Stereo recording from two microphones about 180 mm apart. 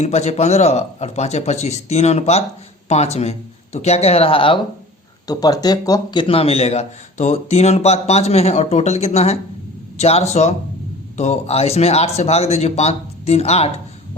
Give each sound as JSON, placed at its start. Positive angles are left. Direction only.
{"t": 0.0, "sound": "speech", "side_deg": 40}